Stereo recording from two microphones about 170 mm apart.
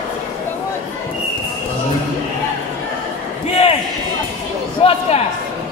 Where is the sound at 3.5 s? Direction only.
35° left (ahead or behind).